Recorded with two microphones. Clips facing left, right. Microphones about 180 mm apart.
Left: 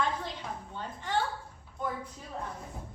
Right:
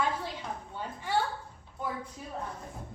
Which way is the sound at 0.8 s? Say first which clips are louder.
Right 1 dB; 10° right (ahead or behind).